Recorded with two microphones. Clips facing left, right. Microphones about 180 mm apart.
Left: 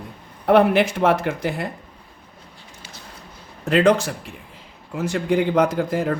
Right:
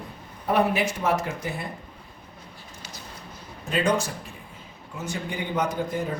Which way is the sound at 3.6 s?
70° left (ahead or behind).